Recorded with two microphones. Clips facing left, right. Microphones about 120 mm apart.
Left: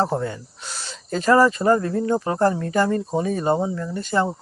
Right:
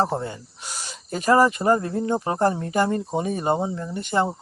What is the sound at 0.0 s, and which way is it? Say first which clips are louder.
Speech: left 1 dB; 20° right (ahead or behind).